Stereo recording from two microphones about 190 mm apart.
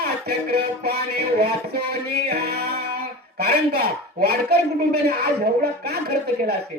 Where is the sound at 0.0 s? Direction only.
55° right (ahead or behind).